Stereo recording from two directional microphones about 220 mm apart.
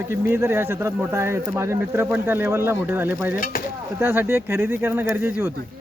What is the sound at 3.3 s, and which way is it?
Speech, 40° left (ahead or behind).